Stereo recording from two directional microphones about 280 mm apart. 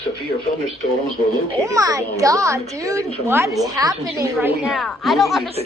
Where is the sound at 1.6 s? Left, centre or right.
Centre.